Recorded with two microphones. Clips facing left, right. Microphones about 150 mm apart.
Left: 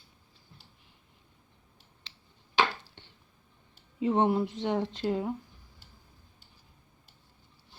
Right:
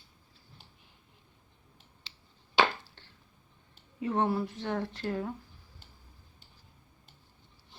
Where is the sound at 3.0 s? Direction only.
20° left (ahead or behind).